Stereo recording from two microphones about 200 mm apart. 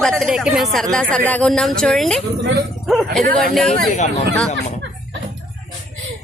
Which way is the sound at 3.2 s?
45° right (ahead or behind).